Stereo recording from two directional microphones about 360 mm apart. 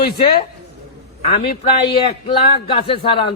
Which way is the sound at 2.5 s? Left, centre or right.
Centre.